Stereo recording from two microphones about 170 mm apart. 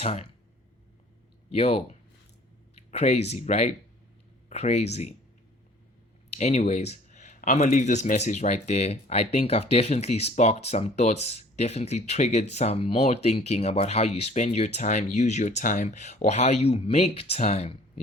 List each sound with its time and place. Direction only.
0.0 s speech: 40° left (ahead or behind)
1.5 s speech: 35° left (ahead or behind)
6.3 s speech: 40° left (ahead or behind)